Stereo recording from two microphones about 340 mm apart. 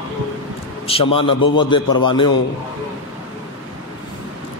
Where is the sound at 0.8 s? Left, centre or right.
Centre.